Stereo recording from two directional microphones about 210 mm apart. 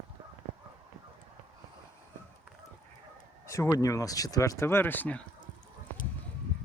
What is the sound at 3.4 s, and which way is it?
Speech, 15° left (ahead or behind).